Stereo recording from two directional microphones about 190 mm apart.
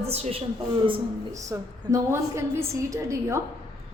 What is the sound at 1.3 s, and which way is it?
A woman's voice, 15° right (ahead or behind).